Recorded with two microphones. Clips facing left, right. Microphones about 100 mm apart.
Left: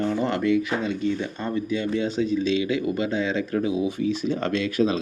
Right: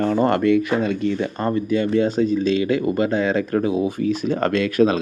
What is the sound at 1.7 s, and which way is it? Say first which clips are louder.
Speech: right 7 dB; 50° right (ahead or behind).